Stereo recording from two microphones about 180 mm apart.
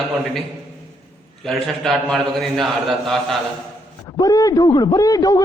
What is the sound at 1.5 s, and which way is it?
A man's voice, centre (ahead or behind).